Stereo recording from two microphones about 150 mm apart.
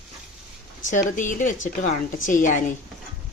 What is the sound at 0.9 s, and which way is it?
Speech, 60° left (ahead or behind).